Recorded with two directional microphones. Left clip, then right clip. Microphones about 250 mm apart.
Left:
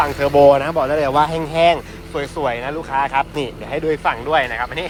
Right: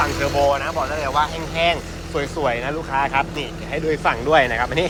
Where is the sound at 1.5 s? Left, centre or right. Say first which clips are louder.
Left 5 dB; centre.